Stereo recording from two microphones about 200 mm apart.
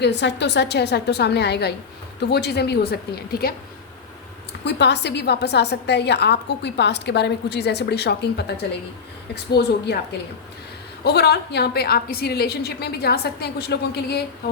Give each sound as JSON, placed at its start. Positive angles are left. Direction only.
{"t": 0.0, "sound": "a woman's voice", "side_deg": 60}
{"t": 4.6, "sound": "a woman's voice", "side_deg": 60}
{"t": 11.0, "sound": "a woman's voice", "side_deg": 55}